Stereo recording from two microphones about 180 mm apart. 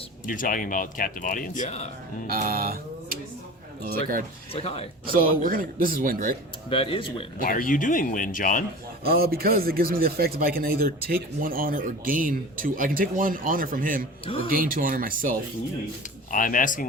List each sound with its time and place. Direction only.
0.3 s speech: 50° left (ahead or behind)
2.3 s a sound: 55° right (ahead or behind)
3.8 s speech: 50° right (ahead or behind)
4.5 s speech: 35° left (ahead or behind)
5.1 s speech: 50° right (ahead or behind)
6.7 s speech: 30° left (ahead or behind)
7.4 s speech: 50° left (ahead or behind)
9.0 s speech: 55° right (ahead or behind)
16.3 s speech: 50° left (ahead or behind)